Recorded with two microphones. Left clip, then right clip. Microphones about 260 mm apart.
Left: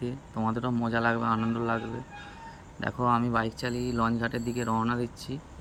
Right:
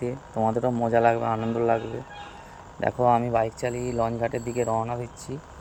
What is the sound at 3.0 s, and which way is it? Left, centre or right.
Speech, right.